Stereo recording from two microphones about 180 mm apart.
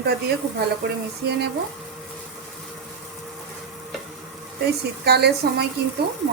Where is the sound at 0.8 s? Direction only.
70° right (ahead or behind).